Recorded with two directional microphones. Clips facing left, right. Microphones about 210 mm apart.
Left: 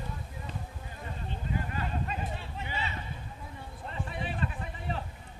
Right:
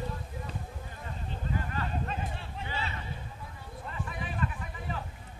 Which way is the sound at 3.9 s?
30° left (ahead or behind).